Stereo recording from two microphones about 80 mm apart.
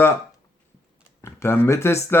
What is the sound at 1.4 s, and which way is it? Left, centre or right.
Speech, left.